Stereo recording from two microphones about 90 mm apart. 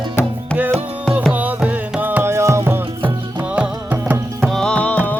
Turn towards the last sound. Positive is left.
turn(degrees=15)  # may be behind; listen again after turning